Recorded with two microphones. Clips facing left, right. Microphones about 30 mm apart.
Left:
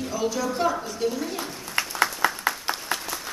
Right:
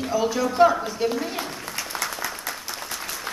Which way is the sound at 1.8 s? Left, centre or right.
Left.